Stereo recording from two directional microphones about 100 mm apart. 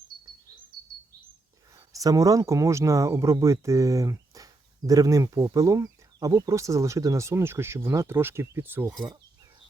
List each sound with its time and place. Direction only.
1.9 s speech: 35° right (ahead or behind)